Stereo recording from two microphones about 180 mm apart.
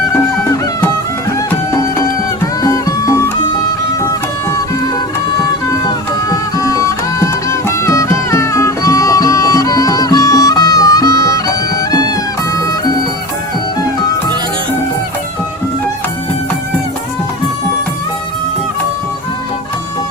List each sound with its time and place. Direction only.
0.5 s music: 20° left (ahead or behind)
6.2 s music: 20° left (ahead or behind)